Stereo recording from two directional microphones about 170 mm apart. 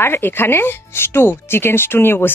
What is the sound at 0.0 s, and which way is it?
Speech, 15° left (ahead or behind).